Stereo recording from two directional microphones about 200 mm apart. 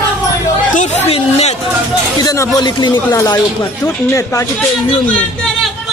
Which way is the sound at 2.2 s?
15° left (ahead or behind).